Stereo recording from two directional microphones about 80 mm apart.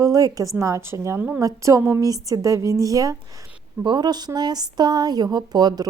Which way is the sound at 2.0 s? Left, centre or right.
Right.